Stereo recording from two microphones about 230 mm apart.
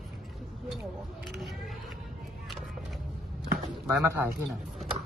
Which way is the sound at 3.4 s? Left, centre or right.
Centre.